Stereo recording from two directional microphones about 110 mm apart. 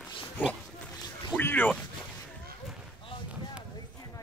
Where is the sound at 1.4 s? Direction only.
20° left (ahead or behind).